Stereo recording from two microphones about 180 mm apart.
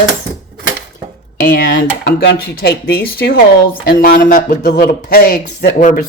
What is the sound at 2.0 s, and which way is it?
Speech, 60° left (ahead or behind).